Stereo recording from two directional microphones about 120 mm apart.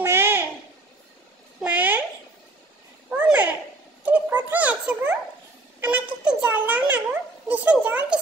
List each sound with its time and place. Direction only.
0.0 s babbling: 20° right (ahead or behind)
1.6 s babbling: 15° right (ahead or behind)
3.1 s a sound: 10° right (ahead or behind)